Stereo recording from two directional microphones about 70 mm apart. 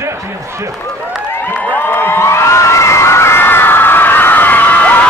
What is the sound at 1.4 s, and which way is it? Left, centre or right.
Crowd, left.